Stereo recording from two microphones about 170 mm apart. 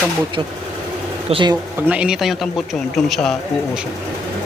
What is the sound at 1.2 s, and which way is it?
Speech, 30° right (ahead or behind).